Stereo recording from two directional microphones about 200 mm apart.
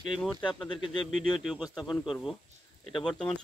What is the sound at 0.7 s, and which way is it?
Speech, 20° left (ahead or behind).